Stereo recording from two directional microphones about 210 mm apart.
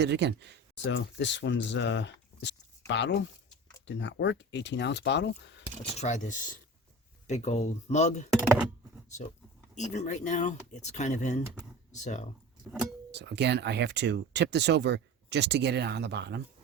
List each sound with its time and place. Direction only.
0.0 s speech: 55° right (ahead or behind)
0.8 s speech: 60° left (ahead or behind)
6.0 s speech: 35° left (ahead or behind)
9.7 s speech: 35° left (ahead or behind)
13.1 s speech: 55° right (ahead or behind)